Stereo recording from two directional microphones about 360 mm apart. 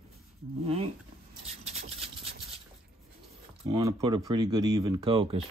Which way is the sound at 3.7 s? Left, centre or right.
Centre.